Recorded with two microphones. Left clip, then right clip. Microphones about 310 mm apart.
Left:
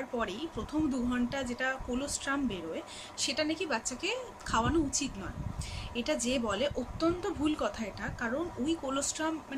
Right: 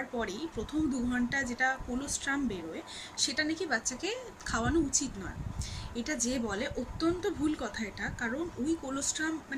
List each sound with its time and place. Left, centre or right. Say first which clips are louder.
0.2 s speech: even; centre